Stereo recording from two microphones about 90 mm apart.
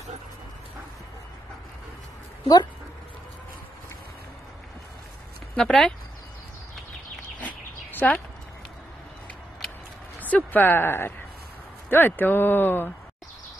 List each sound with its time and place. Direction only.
2.4 s speech: 50° left (ahead or behind)
5.6 s speech: 5° left (ahead or behind)
7.3 s a sound: 15° left (ahead or behind)
10.2 s speech: 20° left (ahead or behind)